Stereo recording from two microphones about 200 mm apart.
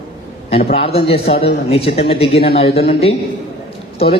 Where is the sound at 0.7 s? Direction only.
30° left (ahead or behind).